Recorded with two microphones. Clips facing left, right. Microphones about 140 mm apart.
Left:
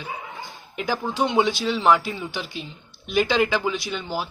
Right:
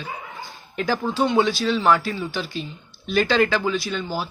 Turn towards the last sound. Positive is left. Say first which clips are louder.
# right 2 dB
turn(degrees=15)  # may be behind; listen again after turning